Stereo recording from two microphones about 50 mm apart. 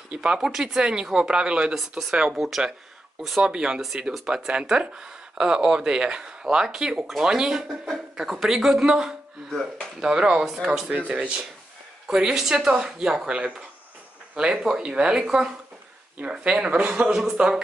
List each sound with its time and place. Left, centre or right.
0.1 s speech: centre
2.3 s speech: centre
3.4 s speech: centre
10.9 s speech: right
12.4 s speech: centre
17.1 s speech: centre